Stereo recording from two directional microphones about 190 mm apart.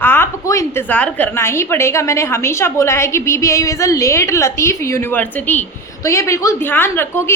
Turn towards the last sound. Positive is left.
turn(degrees=15)  # may be behind; listen again after turning